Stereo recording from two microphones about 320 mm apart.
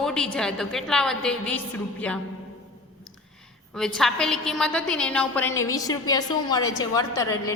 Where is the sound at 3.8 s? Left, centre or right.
Centre.